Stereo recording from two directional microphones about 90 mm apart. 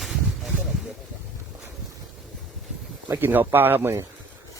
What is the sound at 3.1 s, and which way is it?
Speech, 25° right (ahead or behind).